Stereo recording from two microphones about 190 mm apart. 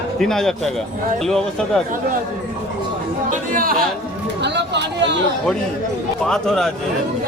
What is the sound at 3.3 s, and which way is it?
Chatter, 45° right (ahead or behind).